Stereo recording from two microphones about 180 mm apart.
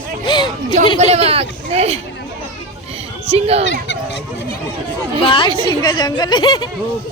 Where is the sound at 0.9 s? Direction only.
35° right (ahead or behind).